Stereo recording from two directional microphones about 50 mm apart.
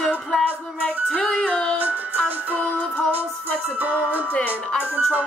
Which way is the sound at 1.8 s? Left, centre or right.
Right.